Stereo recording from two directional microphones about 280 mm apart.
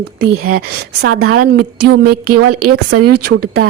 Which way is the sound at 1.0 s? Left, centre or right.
Right.